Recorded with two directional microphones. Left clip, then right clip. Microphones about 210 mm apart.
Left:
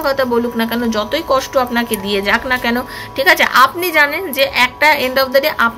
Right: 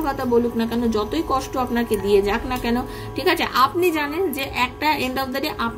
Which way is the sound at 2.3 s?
10° right (ahead or behind).